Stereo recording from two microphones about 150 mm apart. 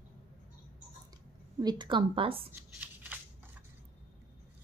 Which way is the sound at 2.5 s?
10° right (ahead or behind).